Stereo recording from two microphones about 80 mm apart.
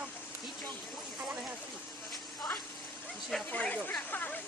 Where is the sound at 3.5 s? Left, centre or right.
Centre.